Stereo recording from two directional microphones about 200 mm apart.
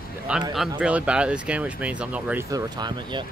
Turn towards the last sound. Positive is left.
turn(degrees=-20)  # may be behind; listen again after turning